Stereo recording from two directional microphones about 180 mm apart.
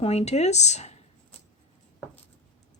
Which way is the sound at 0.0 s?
35° left (ahead or behind).